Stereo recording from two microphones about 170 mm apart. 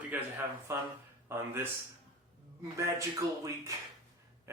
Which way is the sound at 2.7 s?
20° right (ahead or behind).